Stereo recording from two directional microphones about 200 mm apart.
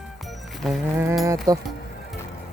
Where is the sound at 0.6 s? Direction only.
Centre (ahead or behind).